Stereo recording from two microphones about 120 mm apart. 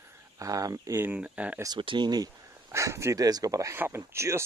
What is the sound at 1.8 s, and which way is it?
Speech, 40° right (ahead or behind).